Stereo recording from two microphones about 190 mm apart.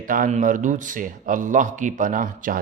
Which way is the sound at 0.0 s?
45° right (ahead or behind).